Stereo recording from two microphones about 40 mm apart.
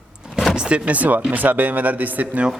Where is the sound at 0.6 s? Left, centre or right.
Right.